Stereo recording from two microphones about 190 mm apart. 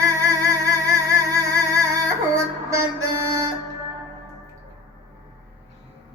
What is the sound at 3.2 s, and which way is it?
Music, 15° right (ahead or behind).